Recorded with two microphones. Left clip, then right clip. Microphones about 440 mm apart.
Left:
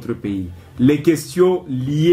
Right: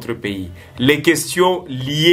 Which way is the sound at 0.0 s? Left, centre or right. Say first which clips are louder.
Right 1 dB; right.